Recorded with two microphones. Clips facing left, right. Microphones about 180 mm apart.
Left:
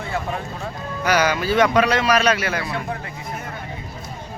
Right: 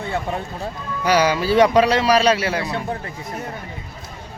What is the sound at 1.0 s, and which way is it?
A man's voice, 30° right (ahead or behind).